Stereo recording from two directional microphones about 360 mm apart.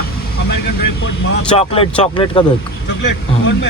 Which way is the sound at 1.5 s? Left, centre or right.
Centre.